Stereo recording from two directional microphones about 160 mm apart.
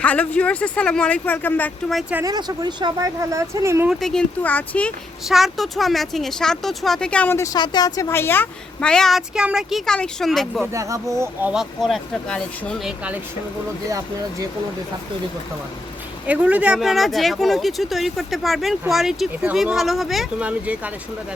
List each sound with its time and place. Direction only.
0.0 s speech: 10° left (ahead or behind)
1.9 s a woman's voice: 5° right (ahead or behind)
2.2 s speech: 25° right (ahead or behind)
3.8 s a woman's voice: 5° left (ahead or behind)
10.6 s speech: 20° right (ahead or behind)
11.5 s a woman's voice: centre (ahead or behind)
16.2 s a woman's voice: 10° right (ahead or behind)